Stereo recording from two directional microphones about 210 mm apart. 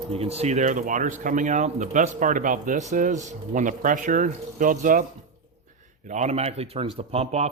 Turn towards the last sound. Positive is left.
turn(degrees=-30)  # may be behind; listen again after turning